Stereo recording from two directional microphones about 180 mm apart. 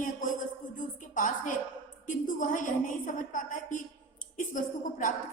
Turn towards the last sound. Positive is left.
turn(degrees=45)  # may be behind; listen again after turning